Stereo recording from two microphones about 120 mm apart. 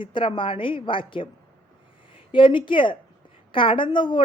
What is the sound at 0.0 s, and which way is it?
Speech, 45° left (ahead or behind).